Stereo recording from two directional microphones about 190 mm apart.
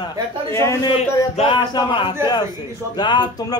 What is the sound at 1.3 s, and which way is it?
A man's voice, 30° left (ahead or behind).